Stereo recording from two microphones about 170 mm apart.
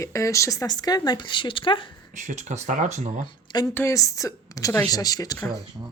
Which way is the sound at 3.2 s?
25° left (ahead or behind).